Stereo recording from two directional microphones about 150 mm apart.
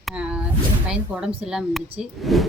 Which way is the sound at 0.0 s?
5° right (ahead or behind).